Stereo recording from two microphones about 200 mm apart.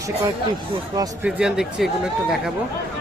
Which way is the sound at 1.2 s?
5° right (ahead or behind).